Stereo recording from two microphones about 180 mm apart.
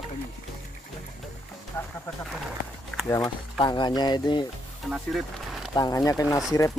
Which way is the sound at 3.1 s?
20° left (ahead or behind).